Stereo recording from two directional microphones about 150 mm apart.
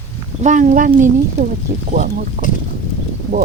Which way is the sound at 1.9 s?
70° right (ahead or behind).